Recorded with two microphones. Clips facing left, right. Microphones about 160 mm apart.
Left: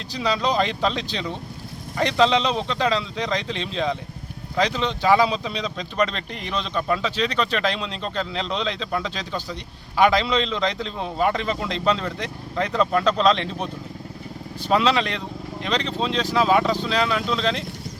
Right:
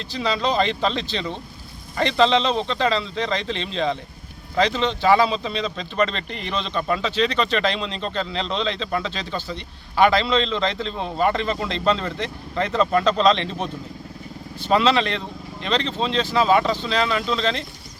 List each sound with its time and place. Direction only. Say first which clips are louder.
0.1 s a man's voice: even; 10° left (ahead or behind)
14.7 s a man's voice: right 2 dB; 5° left (ahead or behind)